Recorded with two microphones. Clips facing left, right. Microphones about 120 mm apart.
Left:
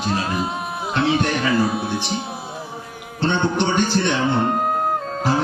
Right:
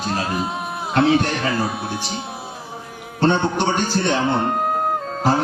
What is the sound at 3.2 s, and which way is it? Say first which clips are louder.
A man's voice: right 2 dB; 45° right (ahead or behind).